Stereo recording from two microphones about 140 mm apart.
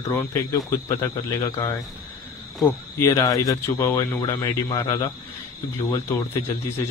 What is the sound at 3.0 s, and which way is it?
Speech, 20° left (ahead or behind).